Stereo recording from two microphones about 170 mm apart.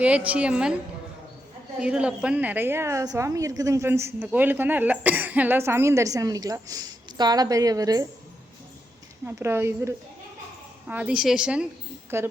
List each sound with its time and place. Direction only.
0.0 s a woman's voice: 10° right (ahead or behind)
1.8 s a woman's voice: 5° right (ahead or behind); by 8.0 s 20° right (ahead or behind)
9.2 s a woman's voice: 15° right (ahead or behind)